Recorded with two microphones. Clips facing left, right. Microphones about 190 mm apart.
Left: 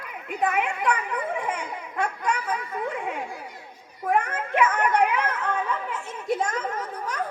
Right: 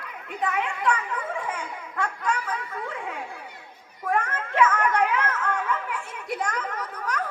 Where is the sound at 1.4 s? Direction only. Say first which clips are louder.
Left 2 dB; 20° left (ahead or behind).